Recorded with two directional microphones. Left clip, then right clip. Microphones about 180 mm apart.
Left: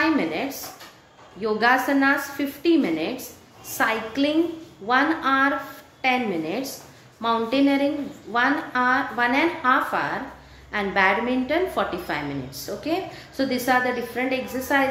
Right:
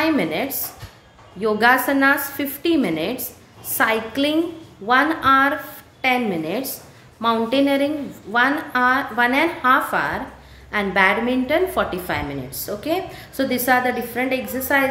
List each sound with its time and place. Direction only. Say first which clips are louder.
0.0 s a woman's voice: right 2 dB; 25° right (ahead or behind)